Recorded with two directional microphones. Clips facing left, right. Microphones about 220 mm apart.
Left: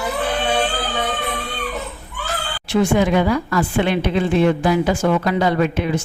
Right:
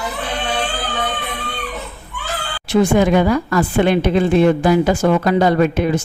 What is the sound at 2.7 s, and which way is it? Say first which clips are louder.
A woman's voice: right 3 dB; 40° right (ahead or behind).